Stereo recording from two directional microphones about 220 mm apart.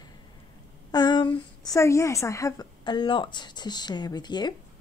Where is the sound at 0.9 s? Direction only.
20° left (ahead or behind).